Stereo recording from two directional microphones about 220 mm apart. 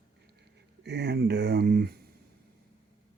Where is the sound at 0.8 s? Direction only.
50° right (ahead or behind).